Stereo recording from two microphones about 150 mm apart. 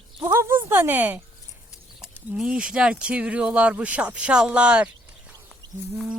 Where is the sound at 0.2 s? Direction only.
15° right (ahead or behind).